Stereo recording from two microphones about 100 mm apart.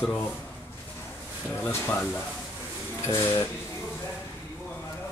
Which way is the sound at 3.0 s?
25° left (ahead or behind).